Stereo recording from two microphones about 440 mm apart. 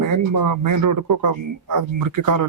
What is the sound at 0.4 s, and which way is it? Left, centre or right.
Speech, right.